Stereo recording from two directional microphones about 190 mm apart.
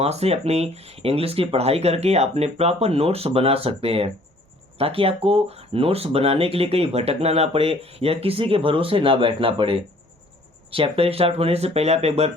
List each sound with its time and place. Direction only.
0.0 s speech: 35° right (ahead or behind)